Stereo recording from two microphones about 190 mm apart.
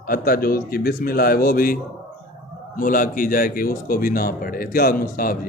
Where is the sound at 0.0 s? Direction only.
50° left (ahead or behind).